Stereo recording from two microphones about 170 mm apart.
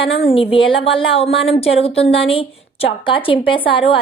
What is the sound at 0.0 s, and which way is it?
A woman's voice, 35° left (ahead or behind).